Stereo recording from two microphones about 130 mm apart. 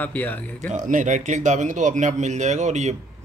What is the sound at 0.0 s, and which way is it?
Speech, 15° left (ahead or behind).